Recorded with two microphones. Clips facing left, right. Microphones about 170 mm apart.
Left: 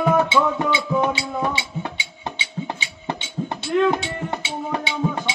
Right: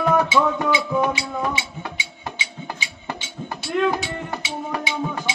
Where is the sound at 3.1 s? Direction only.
25° left (ahead or behind).